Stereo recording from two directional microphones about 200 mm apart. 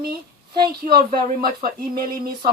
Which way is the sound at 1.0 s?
45° right (ahead or behind).